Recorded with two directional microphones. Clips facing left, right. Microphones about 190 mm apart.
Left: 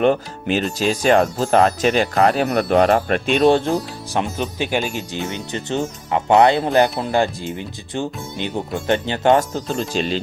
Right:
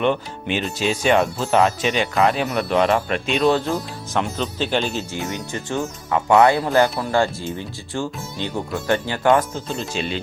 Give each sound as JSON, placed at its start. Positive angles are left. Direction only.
{"t": 0.0, "sound": "speech", "side_deg": 40}
{"t": 4.1, "sound": "speech", "side_deg": 15}
{"t": 9.9, "sound": "speech", "side_deg": 40}